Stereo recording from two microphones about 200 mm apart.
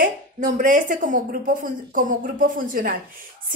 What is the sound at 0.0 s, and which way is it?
A woman's voice, 45° right (ahead or behind).